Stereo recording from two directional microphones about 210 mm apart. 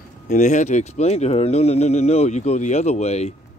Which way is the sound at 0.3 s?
35° left (ahead or behind).